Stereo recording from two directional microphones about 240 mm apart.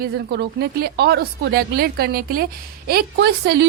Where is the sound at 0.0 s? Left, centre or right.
Right.